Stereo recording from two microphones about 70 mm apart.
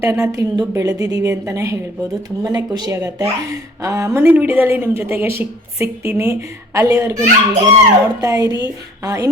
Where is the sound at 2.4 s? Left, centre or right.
Right.